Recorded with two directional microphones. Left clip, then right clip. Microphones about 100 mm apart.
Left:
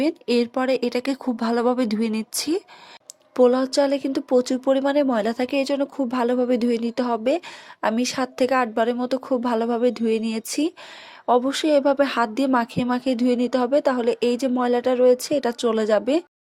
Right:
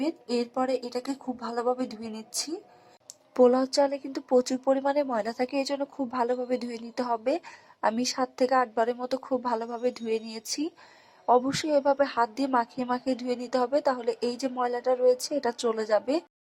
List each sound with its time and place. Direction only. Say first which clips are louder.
0.0 s speech: left 8 dB; 60° left (ahead or behind)
3.3 s speech: left 4 dB; 50° left (ahead or behind)
5.7 s speech: left 6 dB; 40° left (ahead or behind)